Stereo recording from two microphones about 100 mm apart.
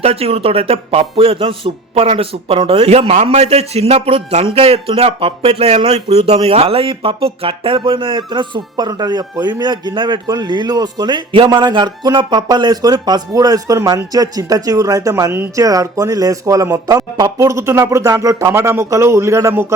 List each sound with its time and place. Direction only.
0.0 s a man's voice: 85° right; by 19.6 s 30° right (ahead or behind)